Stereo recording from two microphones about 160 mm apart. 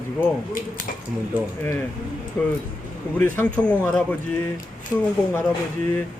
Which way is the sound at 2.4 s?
10° left (ahead or behind).